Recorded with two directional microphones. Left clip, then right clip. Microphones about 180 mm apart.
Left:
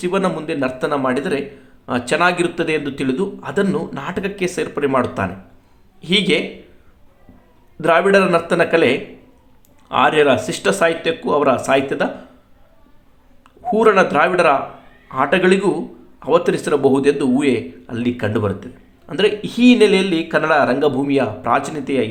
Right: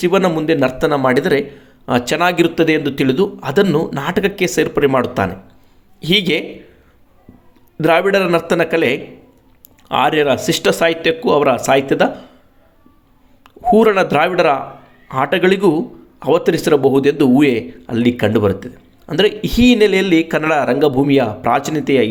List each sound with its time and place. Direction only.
0.0 s speech: 35° right (ahead or behind)
7.8 s speech: 35° right (ahead or behind)
13.4 s a woman's voice: 35° right (ahead or behind)